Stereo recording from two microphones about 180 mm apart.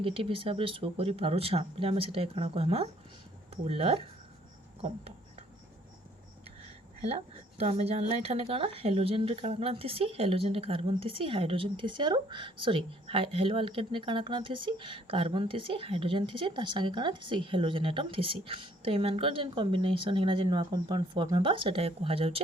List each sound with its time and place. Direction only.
0.0 s speech: 30° right (ahead or behind)
4.8 s a sound: 35° right (ahead or behind)
7.6 s speech: 35° right (ahead or behind)